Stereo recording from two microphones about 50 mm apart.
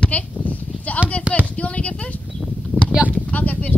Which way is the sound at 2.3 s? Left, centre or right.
Centre.